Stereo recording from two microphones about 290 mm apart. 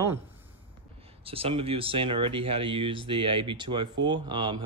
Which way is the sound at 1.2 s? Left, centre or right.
Centre.